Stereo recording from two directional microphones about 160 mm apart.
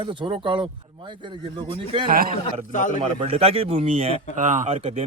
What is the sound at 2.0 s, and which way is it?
Speech, 65° right (ahead or behind).